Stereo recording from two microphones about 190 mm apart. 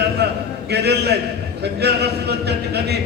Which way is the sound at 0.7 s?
60° right (ahead or behind).